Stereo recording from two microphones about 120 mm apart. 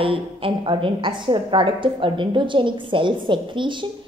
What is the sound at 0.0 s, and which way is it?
A woman's voice, 50° right (ahead or behind).